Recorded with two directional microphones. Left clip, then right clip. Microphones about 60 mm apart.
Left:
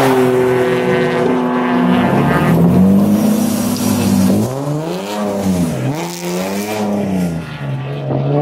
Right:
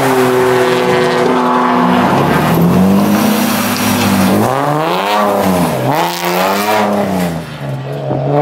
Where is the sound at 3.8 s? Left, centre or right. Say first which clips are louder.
Right 4 dB; right.